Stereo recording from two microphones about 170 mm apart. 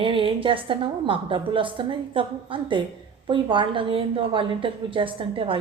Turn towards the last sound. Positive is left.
turn(degrees=-30)  # may be behind; listen again after turning